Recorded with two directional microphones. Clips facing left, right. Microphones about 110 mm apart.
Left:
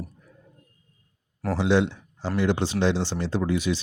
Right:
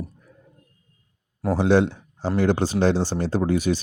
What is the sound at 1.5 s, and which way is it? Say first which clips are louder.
Speech: right 3 dB; 45° right (ahead or behind).